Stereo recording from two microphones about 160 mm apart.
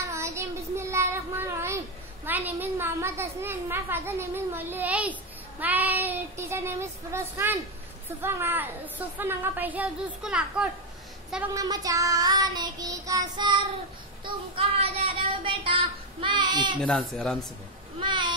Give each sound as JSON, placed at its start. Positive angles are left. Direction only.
{"t": 0.1, "sound": "child singing", "side_deg": -15}
{"t": 2.2, "sound": "a woman's voice", "side_deg": -10}
{"t": 11.5, "sound": "child singing", "side_deg": -20}
{"t": 14.2, "sound": "a sound", "side_deg": -30}
{"t": 16.8, "sound": "speech", "side_deg": 5}
{"t": 18.0, "sound": "a sound", "side_deg": -30}